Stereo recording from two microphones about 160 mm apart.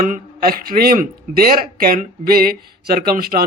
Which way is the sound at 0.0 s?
60° right (ahead or behind).